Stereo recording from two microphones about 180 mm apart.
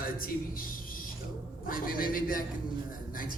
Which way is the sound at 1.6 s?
50° left (ahead or behind).